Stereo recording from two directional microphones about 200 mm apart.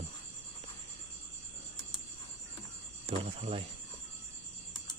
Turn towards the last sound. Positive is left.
turn(degrees=-30)  # may be behind; listen again after turning